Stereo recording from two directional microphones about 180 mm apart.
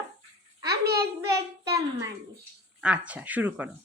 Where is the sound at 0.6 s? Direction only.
65° right (ahead or behind).